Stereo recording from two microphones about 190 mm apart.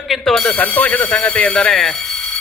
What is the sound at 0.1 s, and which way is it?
A man's voice, centre (ahead or behind).